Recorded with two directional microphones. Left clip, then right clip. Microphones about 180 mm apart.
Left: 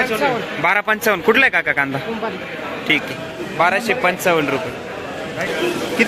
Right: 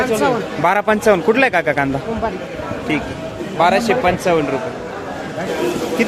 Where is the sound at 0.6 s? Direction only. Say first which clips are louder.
Right 3 dB; 15° right (ahead or behind).